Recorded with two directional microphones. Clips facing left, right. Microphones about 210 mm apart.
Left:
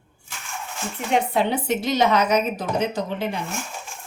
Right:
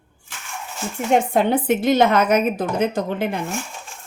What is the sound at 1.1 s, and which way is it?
Speech, 50° right (ahead or behind).